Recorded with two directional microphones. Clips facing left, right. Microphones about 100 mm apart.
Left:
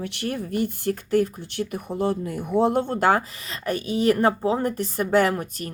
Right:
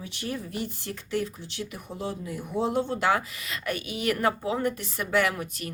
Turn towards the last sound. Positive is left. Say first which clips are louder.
# left 5 dB
turn(degrees=40)  # may be behind; listen again after turning